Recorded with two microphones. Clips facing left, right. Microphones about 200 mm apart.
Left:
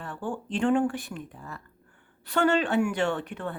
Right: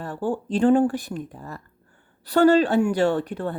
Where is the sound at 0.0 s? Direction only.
40° right (ahead or behind).